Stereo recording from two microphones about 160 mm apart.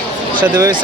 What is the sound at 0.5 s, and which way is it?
Speech, 25° right (ahead or behind).